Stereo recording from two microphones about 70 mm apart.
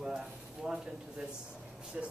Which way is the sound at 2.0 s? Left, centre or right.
Centre.